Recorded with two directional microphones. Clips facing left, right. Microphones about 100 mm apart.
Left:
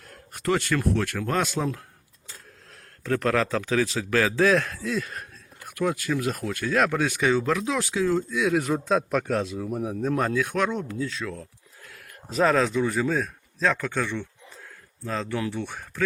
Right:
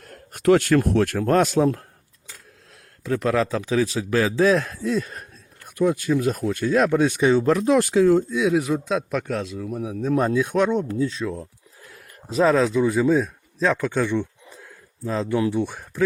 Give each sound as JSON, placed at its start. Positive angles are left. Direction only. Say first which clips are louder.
{"t": 0.4, "sound": "speech", "louder": "right 7 dB", "side_deg": -55}
{"t": 3.0, "sound": "speech", "louder": "right 2 dB", "side_deg": -10}
{"t": 7.6, "sound": "speech", "louder": "right 8 dB", "side_deg": -50}
{"t": 8.3, "sound": "speech", "louder": "right 3 dB", "side_deg": -20}
{"t": 8.6, "sound": "a man's voice", "louder": "even", "side_deg": 0}
{"t": 10.2, "sound": "speech", "louder": "right 6 dB", "side_deg": -20}
{"t": 11.0, "sound": "a sound", "louder": "right 6 dB", "side_deg": -25}
{"t": 12.5, "sound": "speech", "louder": "right 4 dB", "side_deg": -5}